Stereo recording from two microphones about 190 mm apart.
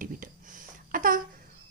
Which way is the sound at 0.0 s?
45° right (ahead or behind).